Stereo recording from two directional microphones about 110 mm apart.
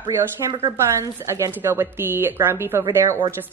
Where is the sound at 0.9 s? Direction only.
25° right (ahead or behind).